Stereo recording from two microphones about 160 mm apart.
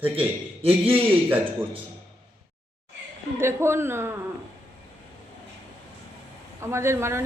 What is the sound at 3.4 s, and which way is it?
Speech, 15° right (ahead or behind).